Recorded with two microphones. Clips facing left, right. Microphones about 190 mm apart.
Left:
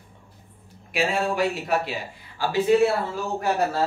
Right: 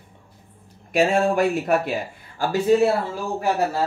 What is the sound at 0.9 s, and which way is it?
Speech, 50° right (ahead or behind).